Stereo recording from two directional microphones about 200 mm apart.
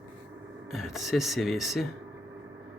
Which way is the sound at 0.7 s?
Centre (ahead or behind).